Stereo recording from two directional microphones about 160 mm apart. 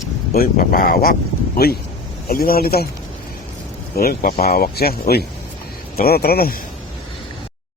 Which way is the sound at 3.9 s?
70° left (ahead or behind).